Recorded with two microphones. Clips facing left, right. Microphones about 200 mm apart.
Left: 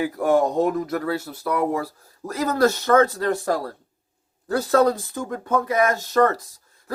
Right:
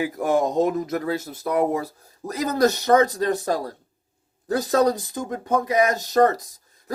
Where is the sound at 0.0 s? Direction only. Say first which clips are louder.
Left 2 dB; 20° right (ahead or behind).